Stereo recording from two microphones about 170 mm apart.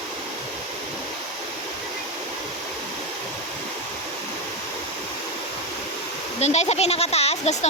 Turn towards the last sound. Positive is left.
turn(degrees=40)  # may be behind; listen again after turning